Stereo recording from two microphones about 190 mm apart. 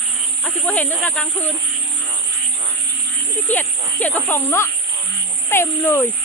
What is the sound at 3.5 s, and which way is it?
Speech, 10° left (ahead or behind).